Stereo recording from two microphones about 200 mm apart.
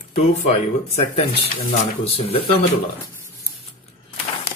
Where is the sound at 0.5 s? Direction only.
30° left (ahead or behind).